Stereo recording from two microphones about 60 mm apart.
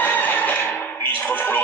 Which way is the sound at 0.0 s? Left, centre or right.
Left.